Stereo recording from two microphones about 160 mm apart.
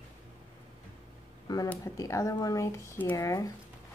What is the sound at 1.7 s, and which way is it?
Speech, 20° left (ahead or behind).